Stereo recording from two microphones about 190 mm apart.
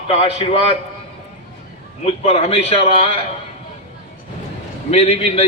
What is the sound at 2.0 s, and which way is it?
A man's voice, 30° left (ahead or behind).